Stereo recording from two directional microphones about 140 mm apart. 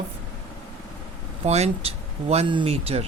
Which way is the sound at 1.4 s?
50° right (ahead or behind).